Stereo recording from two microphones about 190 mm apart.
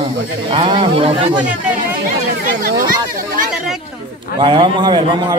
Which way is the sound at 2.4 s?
60° right (ahead or behind).